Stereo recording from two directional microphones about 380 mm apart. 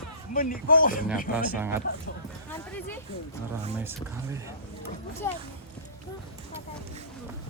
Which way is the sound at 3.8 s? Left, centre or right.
Centre.